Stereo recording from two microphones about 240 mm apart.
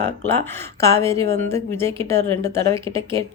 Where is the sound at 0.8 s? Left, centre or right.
Centre.